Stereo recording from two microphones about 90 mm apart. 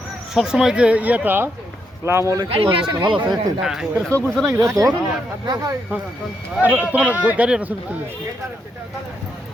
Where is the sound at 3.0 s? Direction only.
65° right (ahead or behind).